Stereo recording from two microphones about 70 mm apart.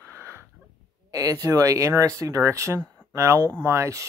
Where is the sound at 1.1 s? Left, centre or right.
Right.